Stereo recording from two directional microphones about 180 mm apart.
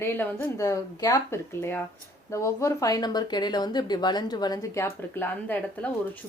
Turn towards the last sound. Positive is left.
turn(degrees=10)  # may be behind; listen again after turning